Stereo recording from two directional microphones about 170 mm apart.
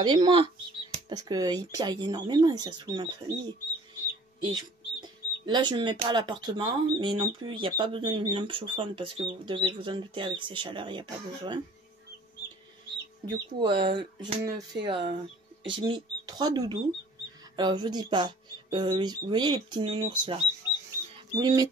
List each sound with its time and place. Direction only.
0.0 s speech: 25° right (ahead or behind)
13.3 s speech: 25° right (ahead or behind)